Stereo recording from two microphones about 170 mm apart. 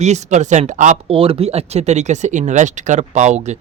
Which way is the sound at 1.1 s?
35° right (ahead or behind).